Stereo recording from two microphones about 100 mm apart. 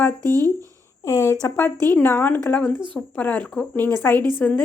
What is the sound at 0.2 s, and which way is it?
Speech, 40° right (ahead or behind).